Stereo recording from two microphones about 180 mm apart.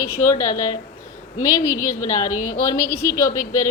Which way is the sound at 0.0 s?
15° left (ahead or behind).